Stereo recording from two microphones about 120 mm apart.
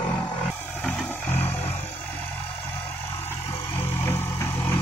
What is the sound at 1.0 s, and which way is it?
Music, 15° left (ahead or behind).